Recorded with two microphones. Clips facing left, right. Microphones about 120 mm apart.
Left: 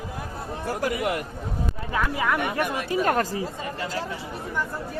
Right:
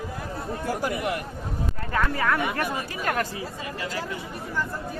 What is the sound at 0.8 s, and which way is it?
Speech, 90° left.